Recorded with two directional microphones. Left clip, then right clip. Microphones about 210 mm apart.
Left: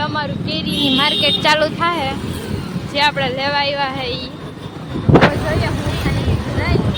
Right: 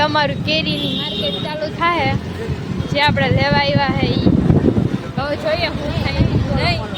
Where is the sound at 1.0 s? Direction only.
30° left (ahead or behind).